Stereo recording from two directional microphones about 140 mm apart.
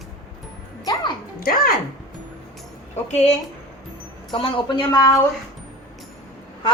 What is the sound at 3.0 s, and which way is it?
Speech, 50° left (ahead or behind).